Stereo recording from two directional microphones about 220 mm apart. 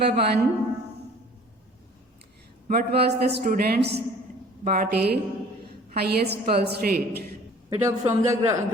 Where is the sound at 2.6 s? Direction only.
45° right (ahead or behind).